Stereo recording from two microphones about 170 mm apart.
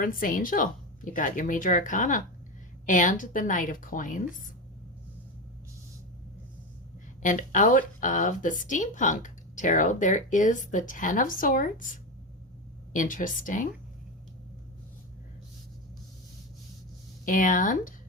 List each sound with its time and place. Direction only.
0.0 s a woman's voice: 55° left (ahead or behind)
7.2 s a woman's voice: 50° left (ahead or behind)
12.9 s a woman's voice: 50° left (ahead or behind)
17.2 s a woman's voice: 50° left (ahead or behind)